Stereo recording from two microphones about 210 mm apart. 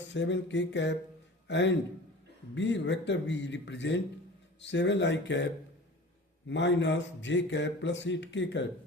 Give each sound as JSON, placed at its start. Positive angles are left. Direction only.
{"t": 0.0, "sound": "a man's voice", "side_deg": 60}
{"t": 6.5, "sound": "speech", "side_deg": 60}